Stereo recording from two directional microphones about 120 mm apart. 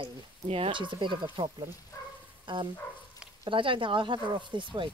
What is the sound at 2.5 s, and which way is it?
Speech, 40° right (ahead or behind).